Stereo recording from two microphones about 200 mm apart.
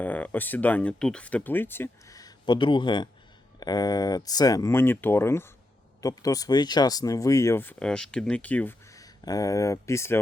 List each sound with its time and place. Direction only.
0.0 s speech: 10° left (ahead or behind)